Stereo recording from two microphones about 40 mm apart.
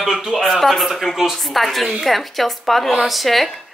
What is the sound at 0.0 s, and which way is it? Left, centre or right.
Speech, centre.